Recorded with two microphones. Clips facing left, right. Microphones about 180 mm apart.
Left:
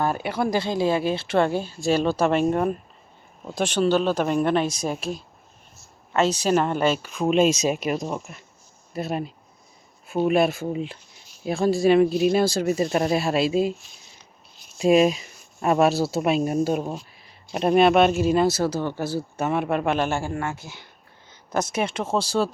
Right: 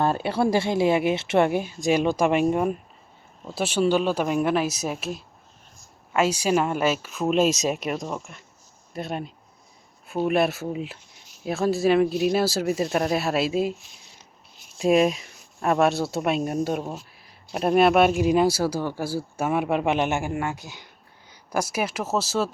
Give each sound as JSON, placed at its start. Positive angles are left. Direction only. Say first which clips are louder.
{"t": 0.3, "sound": "a woman's voice", "louder": "right 2 dB", "side_deg": -30}
{"t": 14.8, "sound": "speech", "louder": "left 2 dB", "side_deg": 0}